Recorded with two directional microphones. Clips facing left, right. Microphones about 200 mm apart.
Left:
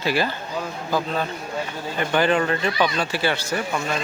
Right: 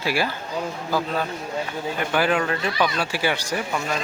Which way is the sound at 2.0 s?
5° right (ahead or behind).